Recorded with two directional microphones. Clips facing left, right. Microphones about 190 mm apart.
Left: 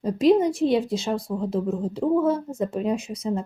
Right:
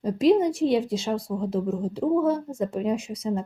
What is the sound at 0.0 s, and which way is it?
Speech, 20° left (ahead or behind).